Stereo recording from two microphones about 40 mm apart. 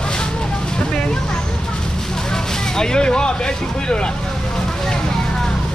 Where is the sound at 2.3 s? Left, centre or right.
Centre.